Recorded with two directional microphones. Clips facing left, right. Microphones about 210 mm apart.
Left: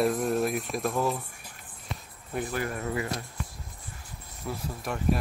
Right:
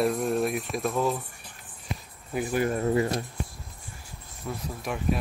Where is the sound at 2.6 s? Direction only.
30° right (ahead or behind).